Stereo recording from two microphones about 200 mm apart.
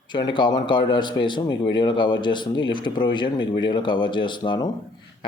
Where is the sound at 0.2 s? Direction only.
20° left (ahead or behind).